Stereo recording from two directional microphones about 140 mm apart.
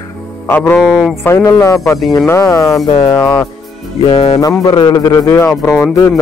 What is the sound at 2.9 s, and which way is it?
Speech, 40° left (ahead or behind).